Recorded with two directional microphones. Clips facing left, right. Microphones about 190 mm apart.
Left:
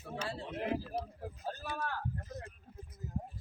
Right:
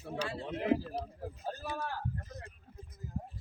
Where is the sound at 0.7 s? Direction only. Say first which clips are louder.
Right 8 dB; 20° right (ahead or behind).